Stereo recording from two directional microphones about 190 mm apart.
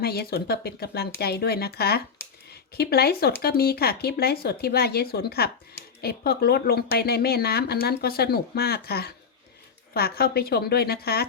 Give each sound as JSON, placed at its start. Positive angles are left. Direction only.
{"t": 0.0, "sound": "speech", "side_deg": 55}